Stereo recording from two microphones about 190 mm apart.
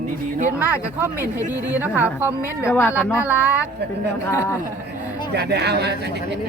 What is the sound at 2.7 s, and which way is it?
Speech, 10° left (ahead or behind).